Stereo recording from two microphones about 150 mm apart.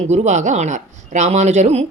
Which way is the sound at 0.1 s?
50° right (ahead or behind).